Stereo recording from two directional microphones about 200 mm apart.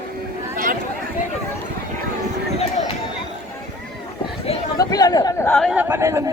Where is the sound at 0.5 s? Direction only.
45° right (ahead or behind).